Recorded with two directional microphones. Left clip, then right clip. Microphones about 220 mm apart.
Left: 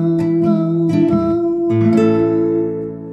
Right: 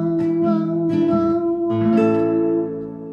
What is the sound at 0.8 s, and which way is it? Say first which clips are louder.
Music: left 3 dB; 50° left (ahead or behind).